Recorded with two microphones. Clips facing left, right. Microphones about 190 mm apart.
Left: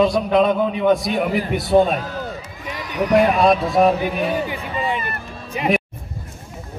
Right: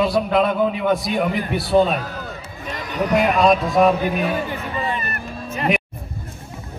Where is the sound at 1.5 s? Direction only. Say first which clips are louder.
Left 1 dB; 20° left (ahead or behind).